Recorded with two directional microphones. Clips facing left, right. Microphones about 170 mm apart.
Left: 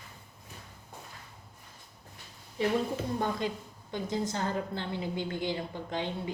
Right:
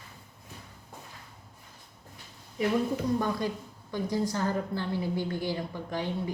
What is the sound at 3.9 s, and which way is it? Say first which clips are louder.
A woman's voice: right 3 dB; 20° left (ahead or behind).